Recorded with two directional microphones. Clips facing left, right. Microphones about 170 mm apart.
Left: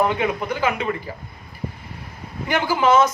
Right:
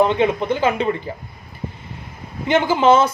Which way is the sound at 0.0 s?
25° right (ahead or behind).